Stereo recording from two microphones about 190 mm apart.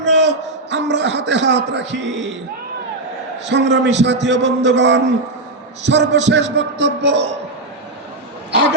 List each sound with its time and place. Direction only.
0.0 s a sound: 70° right (ahead or behind)
0.7 s a man's voice: 70° right (ahead or behind)
3.4 s a man's voice: 70° right (ahead or behind)